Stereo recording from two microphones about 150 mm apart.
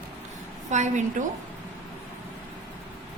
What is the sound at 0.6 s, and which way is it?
Speech, 50° right (ahead or behind).